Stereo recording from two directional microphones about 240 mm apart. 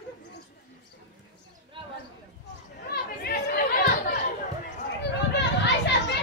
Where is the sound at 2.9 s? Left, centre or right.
Left.